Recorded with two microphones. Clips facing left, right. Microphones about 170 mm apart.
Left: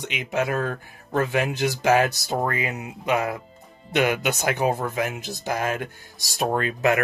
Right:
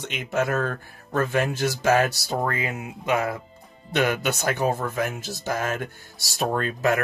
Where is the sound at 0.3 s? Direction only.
10° left (ahead or behind).